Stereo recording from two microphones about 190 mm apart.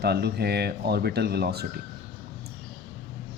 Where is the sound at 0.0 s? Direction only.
60° right (ahead or behind).